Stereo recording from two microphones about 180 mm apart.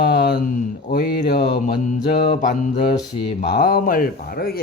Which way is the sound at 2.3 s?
45° left (ahead or behind).